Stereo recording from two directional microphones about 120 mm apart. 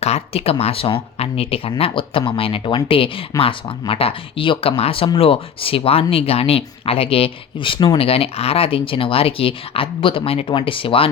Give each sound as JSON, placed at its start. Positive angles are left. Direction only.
{"t": 0.0, "sound": "speech", "side_deg": 60}